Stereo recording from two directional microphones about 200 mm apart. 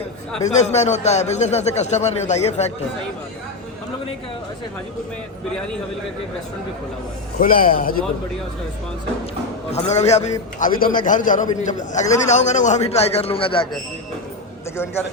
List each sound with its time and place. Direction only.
0.4 s a man's voice: 35° left (ahead or behind)
7.3 s a man's voice: 45° left (ahead or behind)
9.7 s a man's voice: 35° left (ahead or behind)